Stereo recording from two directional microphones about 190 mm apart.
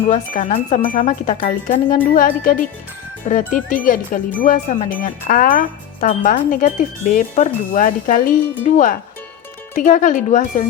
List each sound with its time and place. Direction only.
0.1 s speech: 40° left (ahead or behind)
0.9 s music: 45° left (ahead or behind)
9.7 s speech: 40° left (ahead or behind)